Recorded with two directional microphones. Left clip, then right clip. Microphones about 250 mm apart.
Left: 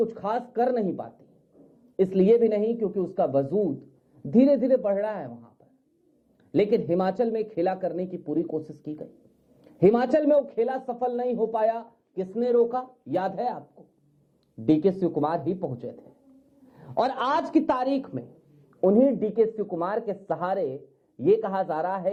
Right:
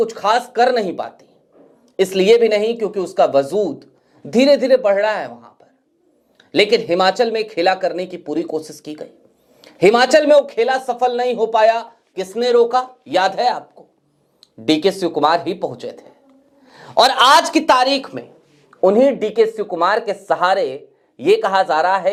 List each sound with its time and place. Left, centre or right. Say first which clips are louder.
0.0 s speech: right 11 dB; centre
3.4 s speech: right 7 dB; right
4.3 s speech: right 8 dB; centre
16.6 s speech: right 12 dB; centre